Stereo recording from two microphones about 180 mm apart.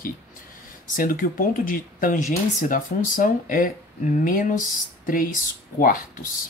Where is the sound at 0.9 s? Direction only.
50° left (ahead or behind).